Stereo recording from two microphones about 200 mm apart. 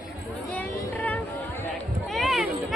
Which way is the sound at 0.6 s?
10° left (ahead or behind).